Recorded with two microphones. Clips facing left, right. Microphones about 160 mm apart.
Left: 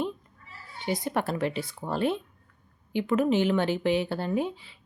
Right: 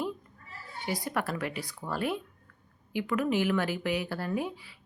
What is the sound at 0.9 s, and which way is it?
Speech, 25° left (ahead or behind).